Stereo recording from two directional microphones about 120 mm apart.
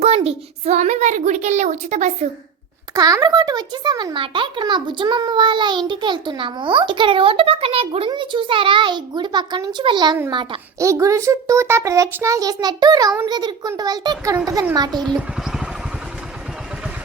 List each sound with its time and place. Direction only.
0.2 s a woman's voice: 60° right (ahead or behind); by 2.1 s 90° right
2.9 s a child's voice: 30° right (ahead or behind)
10.8 s a child's voice: 25° right (ahead or behind)